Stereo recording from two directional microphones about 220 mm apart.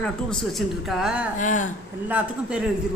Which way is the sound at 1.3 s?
35° left (ahead or behind).